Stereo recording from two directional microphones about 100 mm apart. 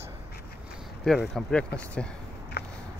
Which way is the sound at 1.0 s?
Centre (ahead or behind).